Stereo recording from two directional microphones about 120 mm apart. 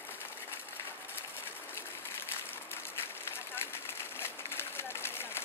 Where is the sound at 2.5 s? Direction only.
20° left (ahead or behind).